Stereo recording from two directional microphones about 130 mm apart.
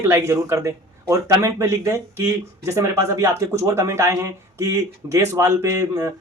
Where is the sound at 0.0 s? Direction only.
20° right (ahead or behind).